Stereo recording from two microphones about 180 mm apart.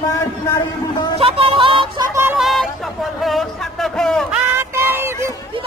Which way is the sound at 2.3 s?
Centre (ahead or behind).